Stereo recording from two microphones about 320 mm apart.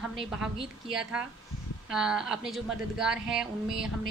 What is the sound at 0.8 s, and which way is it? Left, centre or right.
A woman's voice, centre.